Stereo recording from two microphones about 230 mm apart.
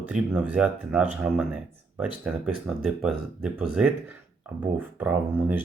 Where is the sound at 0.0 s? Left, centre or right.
Centre.